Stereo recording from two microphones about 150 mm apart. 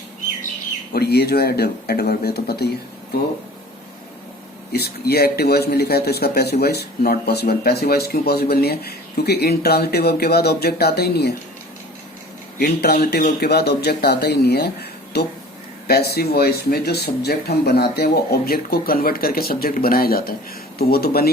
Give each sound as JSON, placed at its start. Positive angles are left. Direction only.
{"t": 0.9, "sound": "speech", "side_deg": 90}
{"t": 4.7, "sound": "speech", "side_deg": 90}
{"t": 12.5, "sound": "speech", "side_deg": 90}